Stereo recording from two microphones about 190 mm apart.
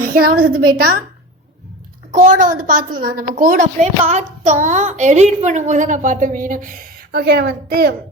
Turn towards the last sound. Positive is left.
turn(degrees=-55)  # may be behind; listen again after turning